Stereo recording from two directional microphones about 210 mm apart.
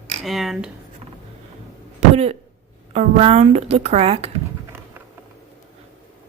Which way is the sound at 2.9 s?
30° right (ahead or behind).